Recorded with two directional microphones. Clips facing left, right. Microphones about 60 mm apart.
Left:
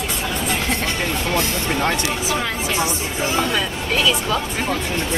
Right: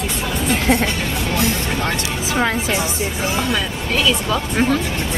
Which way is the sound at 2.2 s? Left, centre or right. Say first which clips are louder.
Right 7 dB; right.